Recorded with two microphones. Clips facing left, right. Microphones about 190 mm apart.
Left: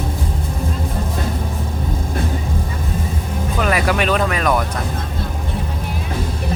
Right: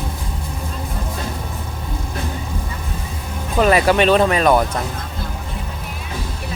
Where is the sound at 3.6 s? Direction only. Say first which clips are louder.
Right 5 dB; 30° right (ahead or behind).